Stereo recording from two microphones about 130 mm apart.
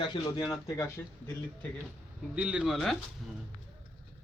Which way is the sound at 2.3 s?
10° right (ahead or behind).